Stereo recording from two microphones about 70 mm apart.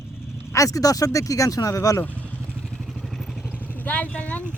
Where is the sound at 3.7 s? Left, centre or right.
Left.